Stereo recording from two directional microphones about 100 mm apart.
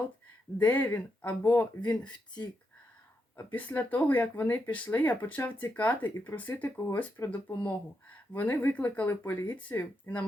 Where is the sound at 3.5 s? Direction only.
15° left (ahead or behind).